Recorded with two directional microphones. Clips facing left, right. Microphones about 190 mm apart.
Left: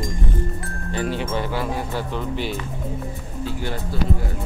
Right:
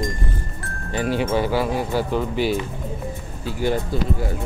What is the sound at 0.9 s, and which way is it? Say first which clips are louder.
Speech: right 4 dB; 10° right (ahead or behind).